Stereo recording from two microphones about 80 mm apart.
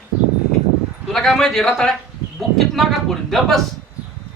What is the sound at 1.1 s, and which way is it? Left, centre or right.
A man's voice, centre.